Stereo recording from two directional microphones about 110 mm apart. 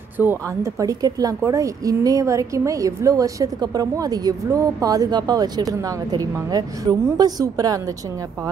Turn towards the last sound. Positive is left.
turn(degrees=-30)  # may be behind; listen again after turning